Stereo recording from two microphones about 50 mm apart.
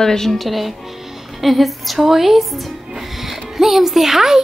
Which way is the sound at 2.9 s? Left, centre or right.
Centre.